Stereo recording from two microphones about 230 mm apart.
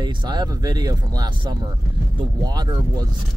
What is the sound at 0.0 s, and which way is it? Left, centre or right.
Speech, centre.